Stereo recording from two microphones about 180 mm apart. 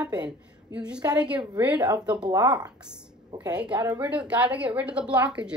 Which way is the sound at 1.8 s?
20° right (ahead or behind).